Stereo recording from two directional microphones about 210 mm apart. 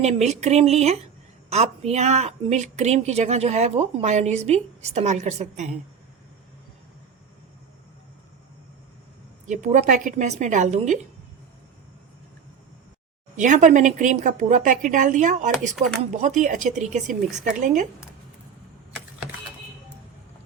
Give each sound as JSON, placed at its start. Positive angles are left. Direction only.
{"t": 0.0, "sound": "speech", "side_deg": -30}
{"t": 9.5, "sound": "speech", "side_deg": -35}
{"t": 13.3, "sound": "speech", "side_deg": -35}
{"t": 15.7, "sound": "speech", "side_deg": 0}
{"t": 16.1, "sound": "speech", "side_deg": -35}